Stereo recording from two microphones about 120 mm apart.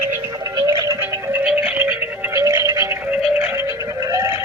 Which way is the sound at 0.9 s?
20° right (ahead or behind).